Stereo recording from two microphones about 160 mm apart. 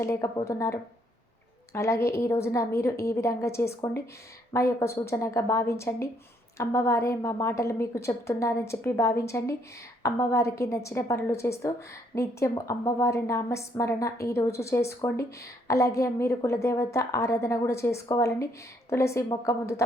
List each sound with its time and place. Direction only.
0.0 s a woman's voice: 20° left (ahead or behind)